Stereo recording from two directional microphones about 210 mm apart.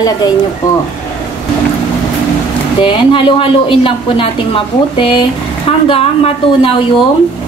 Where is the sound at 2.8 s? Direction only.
25° left (ahead or behind).